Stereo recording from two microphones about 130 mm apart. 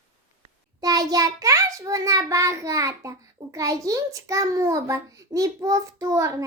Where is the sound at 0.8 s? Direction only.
30° right (ahead or behind).